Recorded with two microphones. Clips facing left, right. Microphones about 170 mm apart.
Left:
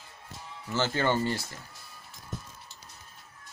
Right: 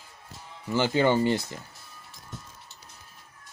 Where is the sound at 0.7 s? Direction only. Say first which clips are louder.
Right 5 dB; 15° right (ahead or behind).